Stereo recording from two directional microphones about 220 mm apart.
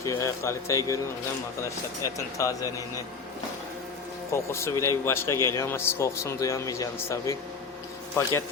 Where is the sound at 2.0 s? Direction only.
15° left (ahead or behind).